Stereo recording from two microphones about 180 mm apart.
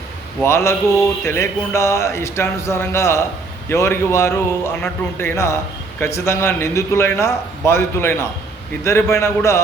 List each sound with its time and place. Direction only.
0.4 s a man's voice: 15° left (ahead or behind)